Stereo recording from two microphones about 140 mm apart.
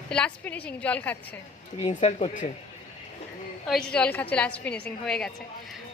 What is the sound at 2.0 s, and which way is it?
Speech, 55° left (ahead or behind).